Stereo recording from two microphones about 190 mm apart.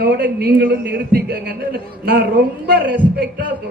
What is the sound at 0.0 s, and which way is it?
A man's voice, 55° right (ahead or behind).